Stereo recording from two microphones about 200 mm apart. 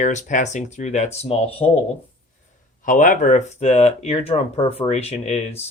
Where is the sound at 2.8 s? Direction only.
40° left (ahead or behind).